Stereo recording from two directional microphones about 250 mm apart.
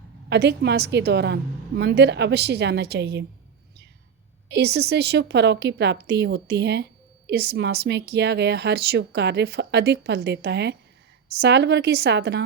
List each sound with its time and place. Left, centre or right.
0.3 s speech: right
4.4 s a woman's voice: right